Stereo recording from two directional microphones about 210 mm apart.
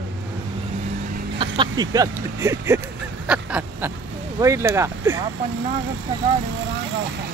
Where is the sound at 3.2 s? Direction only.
5° right (ahead or behind).